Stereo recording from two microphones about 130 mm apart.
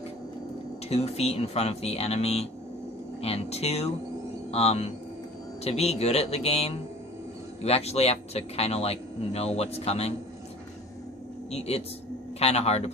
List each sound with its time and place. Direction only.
0.8 s speech: 50° left (ahead or behind)
11.5 s speech: 50° left (ahead or behind)